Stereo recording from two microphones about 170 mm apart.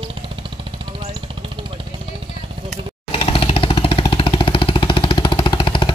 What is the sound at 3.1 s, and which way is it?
Jackhammer, 35° left (ahead or behind).